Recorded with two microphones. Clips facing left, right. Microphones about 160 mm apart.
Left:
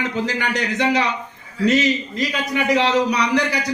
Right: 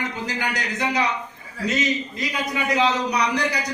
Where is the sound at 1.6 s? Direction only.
90° left.